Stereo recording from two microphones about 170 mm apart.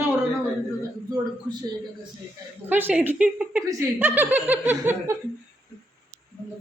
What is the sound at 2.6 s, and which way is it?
Speech, 10° right (ahead or behind).